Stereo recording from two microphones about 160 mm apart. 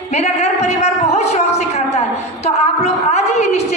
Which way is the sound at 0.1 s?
40° left (ahead or behind).